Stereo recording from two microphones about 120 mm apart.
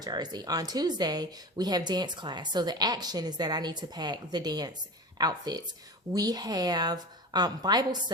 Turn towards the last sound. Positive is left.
turn(degrees=-35)  # may be behind; listen again after turning